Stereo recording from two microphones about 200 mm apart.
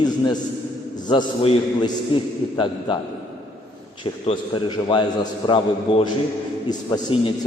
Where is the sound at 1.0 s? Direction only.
25° left (ahead or behind).